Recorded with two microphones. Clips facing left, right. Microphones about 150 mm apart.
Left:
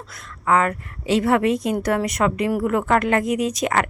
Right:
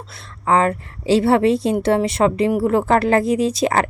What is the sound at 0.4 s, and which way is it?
A woman's voice, 30° right (ahead or behind).